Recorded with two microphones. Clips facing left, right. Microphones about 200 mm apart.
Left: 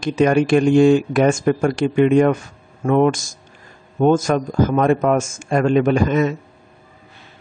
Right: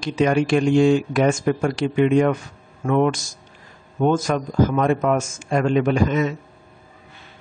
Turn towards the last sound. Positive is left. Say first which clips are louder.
# left 3 dB
turn(degrees=50)  # may be behind; listen again after turning